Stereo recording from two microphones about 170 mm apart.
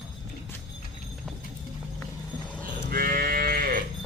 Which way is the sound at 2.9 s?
60° right (ahead or behind).